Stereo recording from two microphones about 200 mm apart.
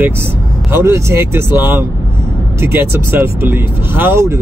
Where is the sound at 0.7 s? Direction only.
15° right (ahead or behind).